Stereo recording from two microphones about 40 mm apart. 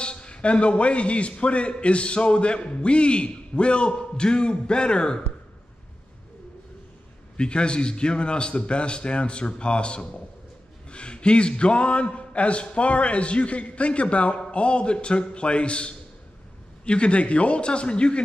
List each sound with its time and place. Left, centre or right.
0.0 s a man's voice: left
7.3 s a man's voice: left